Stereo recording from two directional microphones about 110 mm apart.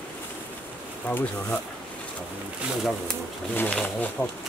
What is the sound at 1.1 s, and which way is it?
Speech, 15° left (ahead or behind).